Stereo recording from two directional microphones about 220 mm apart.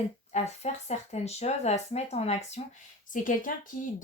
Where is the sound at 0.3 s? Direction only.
30° left (ahead or behind).